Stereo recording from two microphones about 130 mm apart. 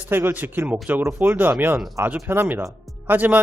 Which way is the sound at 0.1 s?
15° right (ahead or behind).